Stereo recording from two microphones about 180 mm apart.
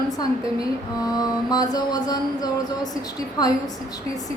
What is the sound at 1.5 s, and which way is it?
Speech, 20° left (ahead or behind).